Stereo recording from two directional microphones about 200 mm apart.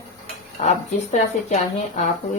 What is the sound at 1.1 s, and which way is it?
Speech, 35° left (ahead or behind).